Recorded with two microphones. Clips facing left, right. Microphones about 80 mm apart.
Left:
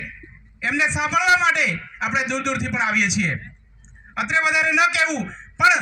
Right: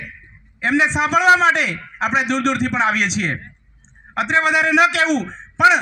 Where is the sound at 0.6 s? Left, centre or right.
Right.